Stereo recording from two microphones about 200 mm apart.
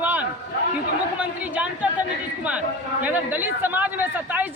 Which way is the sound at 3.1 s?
10° right (ahead or behind).